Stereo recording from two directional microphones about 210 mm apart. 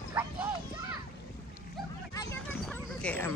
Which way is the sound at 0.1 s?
10° right (ahead or behind).